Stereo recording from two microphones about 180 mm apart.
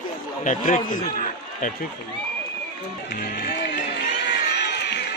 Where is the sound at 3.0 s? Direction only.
65° left (ahead or behind).